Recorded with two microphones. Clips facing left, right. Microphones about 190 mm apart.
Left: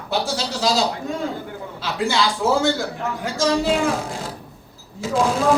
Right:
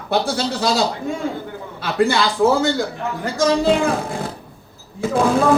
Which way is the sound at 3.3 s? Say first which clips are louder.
Right 3 dB; 60° right (ahead or behind).